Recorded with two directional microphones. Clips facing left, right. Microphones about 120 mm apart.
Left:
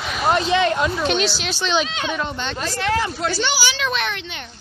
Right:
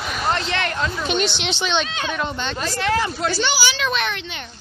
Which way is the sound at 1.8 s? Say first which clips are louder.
Even; 20° left (ahead or behind).